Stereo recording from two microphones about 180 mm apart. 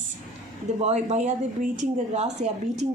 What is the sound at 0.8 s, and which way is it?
Speech, 35° right (ahead or behind).